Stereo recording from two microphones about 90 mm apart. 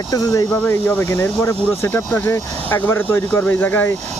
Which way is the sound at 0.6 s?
25° left (ahead or behind).